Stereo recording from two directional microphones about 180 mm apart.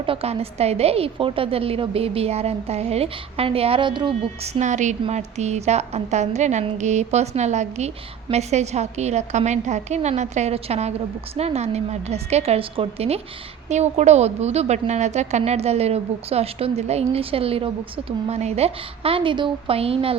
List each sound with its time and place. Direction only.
0.0 s a woman's voice: 30° right (ahead or behind)